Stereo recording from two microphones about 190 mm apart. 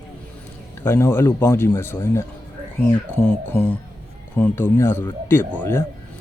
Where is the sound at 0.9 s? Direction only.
15° left (ahead or behind).